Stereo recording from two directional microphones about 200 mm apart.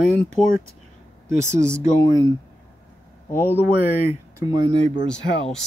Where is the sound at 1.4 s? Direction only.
15° right (ahead or behind).